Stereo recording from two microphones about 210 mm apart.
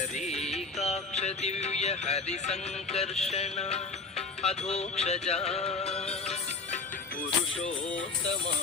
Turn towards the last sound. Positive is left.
turn(degrees=30)  # may be behind; listen again after turning